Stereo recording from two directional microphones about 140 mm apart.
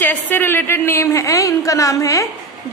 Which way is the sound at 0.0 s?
10° left (ahead or behind).